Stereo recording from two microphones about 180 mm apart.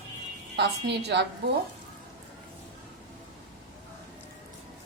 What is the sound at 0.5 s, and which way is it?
Speech, 70° right (ahead or behind).